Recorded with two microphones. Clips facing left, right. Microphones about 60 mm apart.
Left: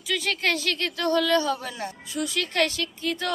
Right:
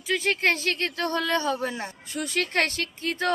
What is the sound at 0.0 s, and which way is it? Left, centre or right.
Speech, right.